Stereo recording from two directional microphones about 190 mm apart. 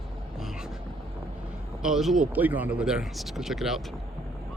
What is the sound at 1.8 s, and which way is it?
Speech, centre (ahead or behind).